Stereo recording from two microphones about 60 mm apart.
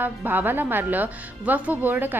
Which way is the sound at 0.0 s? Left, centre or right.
Right.